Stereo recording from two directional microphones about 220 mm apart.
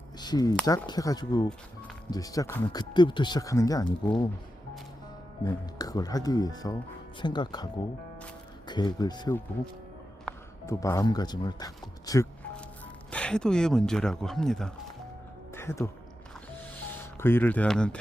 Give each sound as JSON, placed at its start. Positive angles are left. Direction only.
{"t": 0.2, "sound": "speech", "side_deg": 20}
{"t": 5.5, "sound": "speech", "side_deg": 15}
{"t": 10.3, "sound": "a sound", "side_deg": 0}
{"t": 10.7, "sound": "speech", "side_deg": 15}
{"t": 15.5, "sound": "music", "side_deg": 10}
{"t": 17.2, "sound": "speech", "side_deg": 10}